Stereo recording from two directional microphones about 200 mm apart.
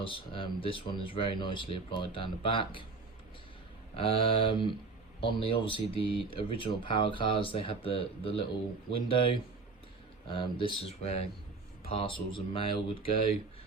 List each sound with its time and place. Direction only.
0.0 s speech: 25° left (ahead or behind)
3.9 s speech: 25° left (ahead or behind)